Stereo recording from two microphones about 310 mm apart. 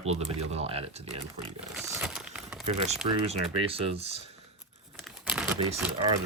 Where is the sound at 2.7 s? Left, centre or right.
Right.